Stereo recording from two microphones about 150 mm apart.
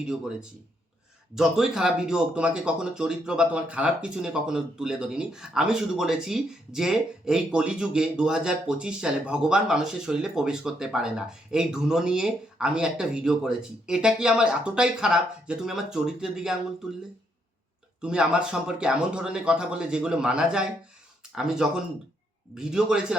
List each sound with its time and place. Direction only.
0.0 s speech: 5° right (ahead or behind)
18.0 s speech: 5° right (ahead or behind)